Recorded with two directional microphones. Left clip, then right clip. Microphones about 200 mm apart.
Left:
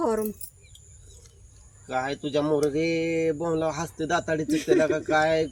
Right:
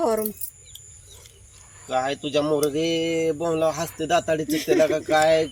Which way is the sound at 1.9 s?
10° left (ahead or behind).